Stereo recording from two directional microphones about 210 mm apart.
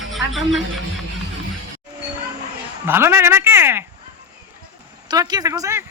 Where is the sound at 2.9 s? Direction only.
10° right (ahead or behind).